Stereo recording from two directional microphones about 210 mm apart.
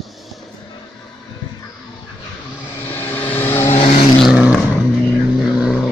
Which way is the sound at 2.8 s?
10° left (ahead or behind).